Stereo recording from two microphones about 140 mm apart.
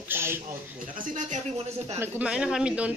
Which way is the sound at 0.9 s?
65° right (ahead or behind).